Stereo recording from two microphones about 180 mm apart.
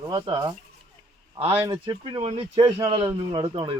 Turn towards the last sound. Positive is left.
turn(degrees=-30)  # may be behind; listen again after turning